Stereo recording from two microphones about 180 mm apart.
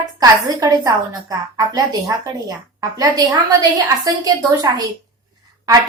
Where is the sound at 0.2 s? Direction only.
20° right (ahead or behind).